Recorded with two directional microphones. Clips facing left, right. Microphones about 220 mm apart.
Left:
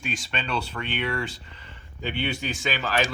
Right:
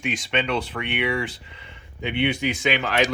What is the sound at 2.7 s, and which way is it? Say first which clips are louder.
Speech: right 2 dB; 20° right (ahead or behind).